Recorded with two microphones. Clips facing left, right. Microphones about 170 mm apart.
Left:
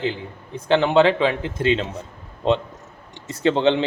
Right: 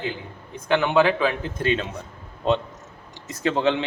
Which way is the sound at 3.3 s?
30° left (ahead or behind).